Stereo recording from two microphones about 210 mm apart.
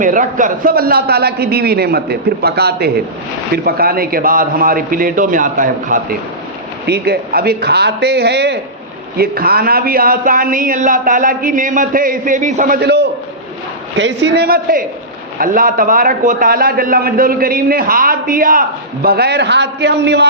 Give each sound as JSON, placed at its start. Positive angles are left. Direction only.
{"t": 0.0, "sound": "a man's voice", "side_deg": -40}
{"t": 6.8, "sound": "a man's voice", "side_deg": -50}